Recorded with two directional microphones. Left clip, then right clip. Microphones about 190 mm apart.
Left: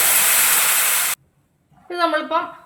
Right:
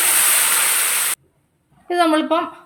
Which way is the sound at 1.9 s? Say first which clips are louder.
Right 3 dB; 40° right (ahead or behind).